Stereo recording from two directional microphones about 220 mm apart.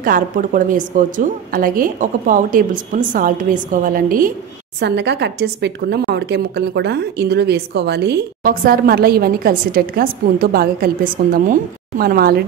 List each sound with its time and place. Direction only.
0.0 s a woman's voice: 40° right (ahead or behind)
4.7 s a woman's voice: 50° right (ahead or behind)